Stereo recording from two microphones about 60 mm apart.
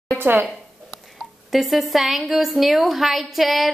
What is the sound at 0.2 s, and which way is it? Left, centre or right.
Speech, right.